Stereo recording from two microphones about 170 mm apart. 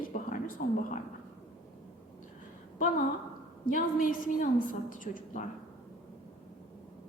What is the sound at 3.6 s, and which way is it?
Speech, 55° left (ahead or behind).